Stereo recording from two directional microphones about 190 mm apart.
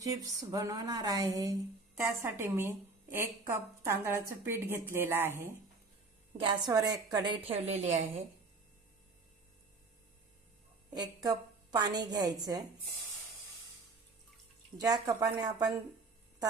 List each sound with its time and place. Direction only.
0.0 s a woman's voice: 20° right (ahead or behind)
6.3 s a woman's voice: 25° right (ahead or behind)
7.7 s a woman's voice: 35° right (ahead or behind)
10.9 s a woman's voice: 20° right (ahead or behind)
14.8 s a woman's voice: 20° right (ahead or behind)